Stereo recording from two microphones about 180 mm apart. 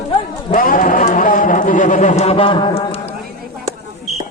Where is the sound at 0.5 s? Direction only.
50° left (ahead or behind); by 3.0 s 30° left (ahead or behind).